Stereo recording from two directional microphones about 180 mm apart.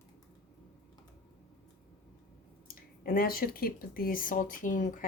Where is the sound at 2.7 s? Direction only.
55° left (ahead or behind).